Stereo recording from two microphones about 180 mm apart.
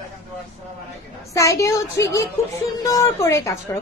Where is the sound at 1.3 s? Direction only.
15° left (ahead or behind).